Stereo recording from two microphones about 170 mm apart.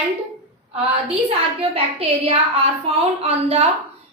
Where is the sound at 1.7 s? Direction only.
35° right (ahead or behind).